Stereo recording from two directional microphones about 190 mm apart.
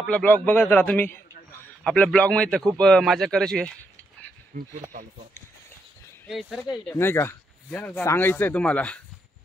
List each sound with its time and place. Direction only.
0.0 s speech: 10° left (ahead or behind)
4.5 s speech: 50° right (ahead or behind)
6.2 s speech: centre (ahead or behind)
6.9 s speech: 10° left (ahead or behind)